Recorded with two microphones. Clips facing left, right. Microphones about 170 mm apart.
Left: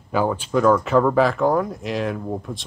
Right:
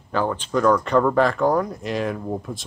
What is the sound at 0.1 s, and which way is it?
Speech, 10° left (ahead or behind).